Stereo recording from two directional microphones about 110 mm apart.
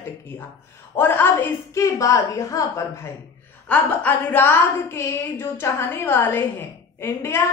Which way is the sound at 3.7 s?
15° left (ahead or behind).